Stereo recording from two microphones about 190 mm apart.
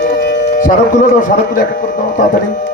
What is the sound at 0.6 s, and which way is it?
A man's voice, 45° left (ahead or behind).